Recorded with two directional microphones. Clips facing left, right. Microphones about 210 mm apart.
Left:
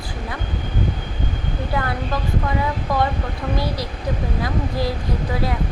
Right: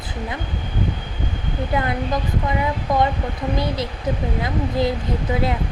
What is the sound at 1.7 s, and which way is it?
Speech, 20° right (ahead or behind).